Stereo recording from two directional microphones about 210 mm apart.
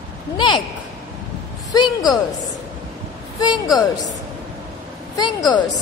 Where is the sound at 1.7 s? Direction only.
20° left (ahead or behind).